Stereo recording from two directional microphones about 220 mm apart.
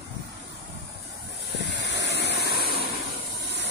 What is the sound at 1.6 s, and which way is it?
Vehicle, 50° left (ahead or behind).